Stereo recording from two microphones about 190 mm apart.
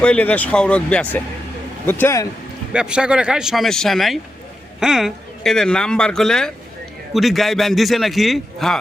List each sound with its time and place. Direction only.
0.0 s speech: 5° left (ahead or behind)
2.7 s speech: 5° right (ahead or behind)